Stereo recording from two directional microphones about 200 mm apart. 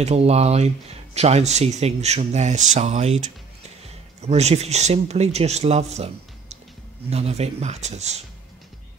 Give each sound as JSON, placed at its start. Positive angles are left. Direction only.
{"t": 0.0, "sound": "speech", "side_deg": -30}
{"t": 4.3, "sound": "speech", "side_deg": -35}